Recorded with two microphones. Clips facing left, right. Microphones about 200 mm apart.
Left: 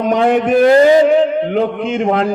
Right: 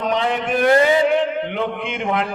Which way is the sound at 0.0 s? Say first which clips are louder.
Left 8 dB; 50° left (ahead or behind).